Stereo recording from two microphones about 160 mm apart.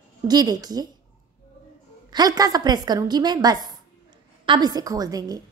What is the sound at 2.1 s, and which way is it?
A woman's voice, 25° right (ahead or behind).